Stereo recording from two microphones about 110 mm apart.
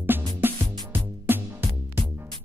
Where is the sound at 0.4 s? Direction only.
20° right (ahead or behind).